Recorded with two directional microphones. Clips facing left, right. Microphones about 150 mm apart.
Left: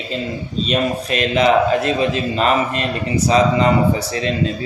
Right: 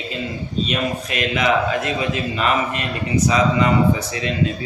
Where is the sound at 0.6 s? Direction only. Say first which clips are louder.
Left 7 dB; 35° left (ahead or behind).